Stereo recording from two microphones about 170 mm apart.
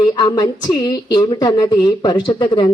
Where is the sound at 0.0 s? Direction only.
25° left (ahead or behind).